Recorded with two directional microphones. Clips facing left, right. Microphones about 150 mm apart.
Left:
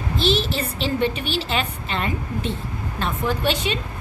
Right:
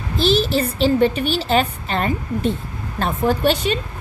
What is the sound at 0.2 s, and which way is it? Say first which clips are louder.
A woman's voice: right 5 dB; 40° right (ahead or behind).